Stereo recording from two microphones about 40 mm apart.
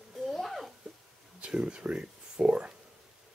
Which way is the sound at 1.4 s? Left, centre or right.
Right.